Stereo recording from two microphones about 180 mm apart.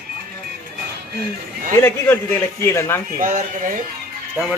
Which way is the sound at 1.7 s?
15° left (ahead or behind).